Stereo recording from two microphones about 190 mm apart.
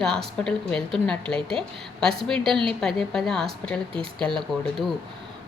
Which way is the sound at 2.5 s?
25° right (ahead or behind).